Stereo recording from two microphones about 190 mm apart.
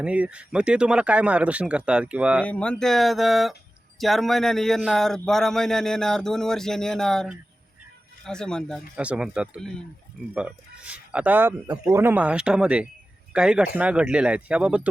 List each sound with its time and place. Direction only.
0.0 s speech: 5° right (ahead or behind)
2.4 s speech: 5° left (ahead or behind)